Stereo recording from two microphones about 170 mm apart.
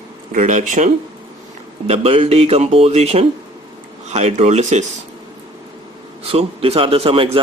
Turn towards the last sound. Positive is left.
turn(degrees=-35)  # may be behind; listen again after turning